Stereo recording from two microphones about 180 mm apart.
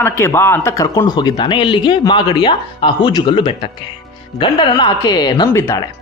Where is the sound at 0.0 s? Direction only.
15° left (ahead or behind).